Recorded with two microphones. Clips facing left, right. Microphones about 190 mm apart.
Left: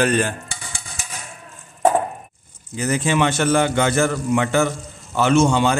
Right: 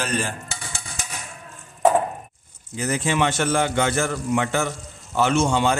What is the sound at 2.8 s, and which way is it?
A man's voice, 90° left.